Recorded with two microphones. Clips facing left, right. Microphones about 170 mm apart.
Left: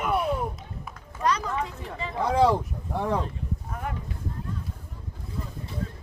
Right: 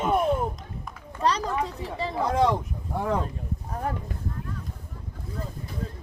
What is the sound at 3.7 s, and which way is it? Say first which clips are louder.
Speech: right 5 dB; 35° right (ahead or behind).